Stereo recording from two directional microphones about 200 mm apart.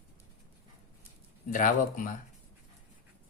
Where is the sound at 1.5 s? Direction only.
40° left (ahead or behind).